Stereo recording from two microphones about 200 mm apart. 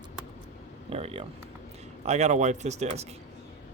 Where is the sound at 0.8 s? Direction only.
30° right (ahead or behind).